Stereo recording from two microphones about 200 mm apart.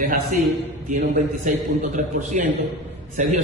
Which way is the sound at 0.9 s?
40° right (ahead or behind).